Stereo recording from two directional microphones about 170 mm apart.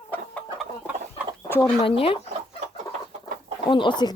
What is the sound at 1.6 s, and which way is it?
Speech, 30° left (ahead or behind).